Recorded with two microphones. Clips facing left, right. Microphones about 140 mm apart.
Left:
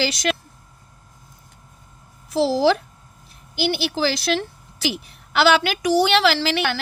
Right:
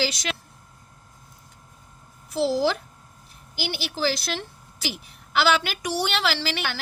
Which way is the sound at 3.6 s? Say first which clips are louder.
Left 6 dB; 80° left.